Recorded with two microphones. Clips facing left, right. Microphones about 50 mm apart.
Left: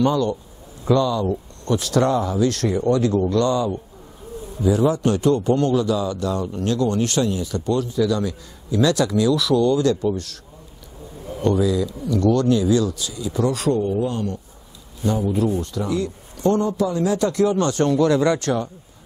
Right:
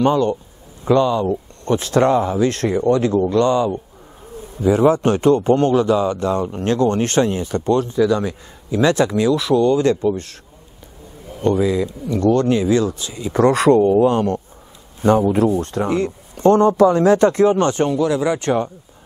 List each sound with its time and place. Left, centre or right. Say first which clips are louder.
0.0 s a man's voice: right 3 dB; right
11.4 s a man's voice: right 2 dB; right
13.3 s a man's voice: right 8 dB; right
17.8 s speech: left 1 dB; centre
18.4 s speech: right 4 dB; right